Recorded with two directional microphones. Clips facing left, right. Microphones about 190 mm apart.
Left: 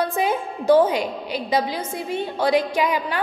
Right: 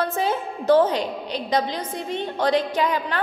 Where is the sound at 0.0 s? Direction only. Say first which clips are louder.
Left 1 dB; 15° left (ahead or behind).